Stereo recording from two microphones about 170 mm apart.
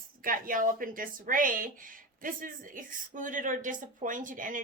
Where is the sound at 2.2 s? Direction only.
55° right (ahead or behind).